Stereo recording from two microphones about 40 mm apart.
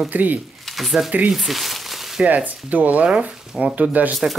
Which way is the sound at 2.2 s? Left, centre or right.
Right.